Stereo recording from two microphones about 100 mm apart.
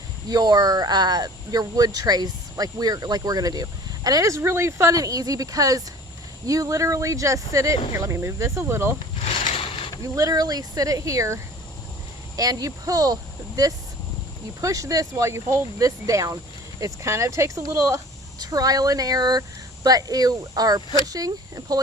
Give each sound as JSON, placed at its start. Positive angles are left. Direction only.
{"t": 0.3, "sound": "speech", "side_deg": -40}
{"t": 9.2, "sound": "mechanisms", "side_deg": 75}
{"t": 10.0, "sound": "speech", "side_deg": -35}
{"t": 12.4, "sound": "speech", "side_deg": -35}
{"t": 14.6, "sound": "speech", "side_deg": -35}